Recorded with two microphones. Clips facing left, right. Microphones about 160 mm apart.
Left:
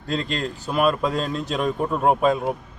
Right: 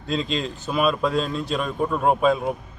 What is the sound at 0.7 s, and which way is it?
A man's voice, centre (ahead or behind).